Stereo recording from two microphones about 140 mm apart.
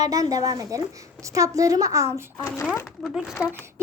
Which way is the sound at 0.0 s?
25° right (ahead or behind).